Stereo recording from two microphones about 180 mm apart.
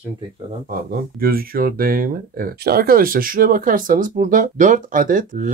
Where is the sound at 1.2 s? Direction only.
55° right (ahead or behind).